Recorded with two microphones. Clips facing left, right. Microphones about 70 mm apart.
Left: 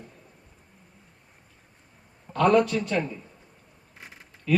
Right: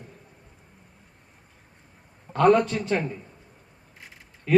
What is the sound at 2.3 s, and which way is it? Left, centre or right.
Music, right.